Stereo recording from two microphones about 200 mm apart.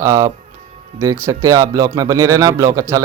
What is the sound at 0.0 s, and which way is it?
Speech, 15° right (ahead or behind).